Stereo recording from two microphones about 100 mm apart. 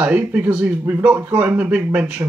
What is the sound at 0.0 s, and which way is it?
Speech, 15° right (ahead or behind).